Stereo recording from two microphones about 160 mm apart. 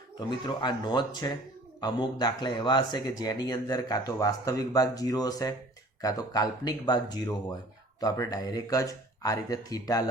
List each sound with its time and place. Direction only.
0.2 s speech: 30° left (ahead or behind)